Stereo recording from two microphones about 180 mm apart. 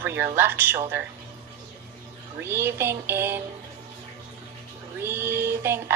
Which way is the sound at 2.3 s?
15° right (ahead or behind).